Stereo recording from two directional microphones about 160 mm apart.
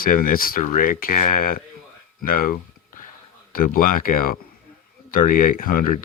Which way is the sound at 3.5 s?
60° left (ahead or behind).